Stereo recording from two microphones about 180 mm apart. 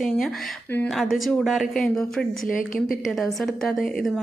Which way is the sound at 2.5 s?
50° left (ahead or behind).